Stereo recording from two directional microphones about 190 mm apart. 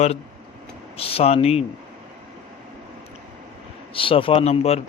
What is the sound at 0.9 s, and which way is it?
Speech, 30° left (ahead or behind).